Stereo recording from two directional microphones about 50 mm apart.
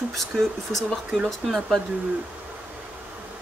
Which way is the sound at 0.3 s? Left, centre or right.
Centre.